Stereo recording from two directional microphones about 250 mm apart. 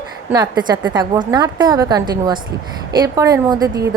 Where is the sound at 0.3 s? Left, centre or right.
Centre.